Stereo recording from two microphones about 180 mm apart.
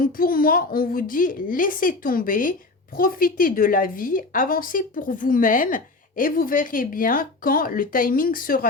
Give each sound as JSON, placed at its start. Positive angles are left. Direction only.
{"t": 0.0, "sound": "a woman's voice", "side_deg": 50}